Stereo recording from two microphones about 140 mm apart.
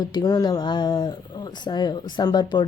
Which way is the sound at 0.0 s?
30° left (ahead or behind).